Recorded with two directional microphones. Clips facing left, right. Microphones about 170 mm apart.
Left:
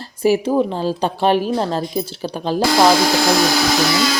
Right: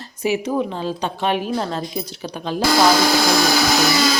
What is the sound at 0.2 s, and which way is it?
A woman's voice, 30° left (ahead or behind).